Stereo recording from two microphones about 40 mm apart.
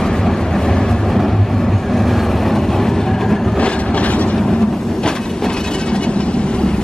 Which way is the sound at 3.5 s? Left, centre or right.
Left.